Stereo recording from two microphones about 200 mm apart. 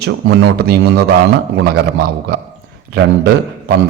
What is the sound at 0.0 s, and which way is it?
A man's voice, 55° right (ahead or behind).